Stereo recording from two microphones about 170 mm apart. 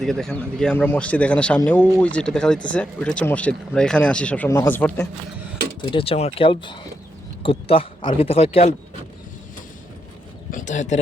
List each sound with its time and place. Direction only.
0.0 s a man's voice: 5° left (ahead or behind)
5.8 s speech: 30° left (ahead or behind)
10.5 s speech: 45° left (ahead or behind)